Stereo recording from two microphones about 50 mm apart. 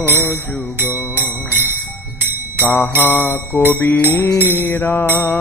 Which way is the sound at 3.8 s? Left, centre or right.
Left.